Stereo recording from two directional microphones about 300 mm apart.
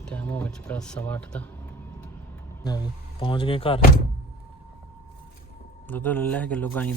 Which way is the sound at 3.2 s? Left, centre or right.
Centre.